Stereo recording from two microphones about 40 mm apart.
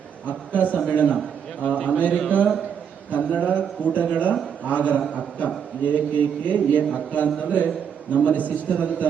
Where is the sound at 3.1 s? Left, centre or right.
Left.